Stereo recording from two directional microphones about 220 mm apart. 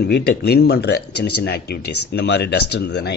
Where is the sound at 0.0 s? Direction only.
45° left (ahead or behind).